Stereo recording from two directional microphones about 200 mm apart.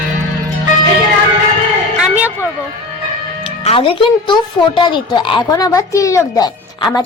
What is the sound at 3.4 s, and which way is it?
Speech, 25° left (ahead or behind).